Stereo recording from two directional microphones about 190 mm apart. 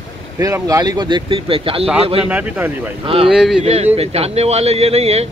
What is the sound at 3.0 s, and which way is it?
Speech, 30° right (ahead or behind).